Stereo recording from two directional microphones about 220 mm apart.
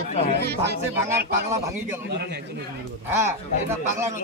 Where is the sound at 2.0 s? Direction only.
45° right (ahead or behind).